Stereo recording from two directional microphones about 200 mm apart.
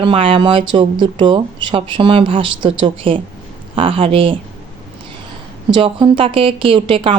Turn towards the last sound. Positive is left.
turn(degrees=-25)  # may be behind; listen again after turning